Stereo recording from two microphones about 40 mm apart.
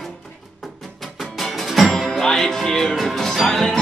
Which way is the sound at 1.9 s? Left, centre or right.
Centre.